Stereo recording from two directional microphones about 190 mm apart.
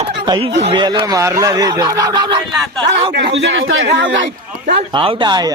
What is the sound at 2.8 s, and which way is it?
Speech, 25° right (ahead or behind).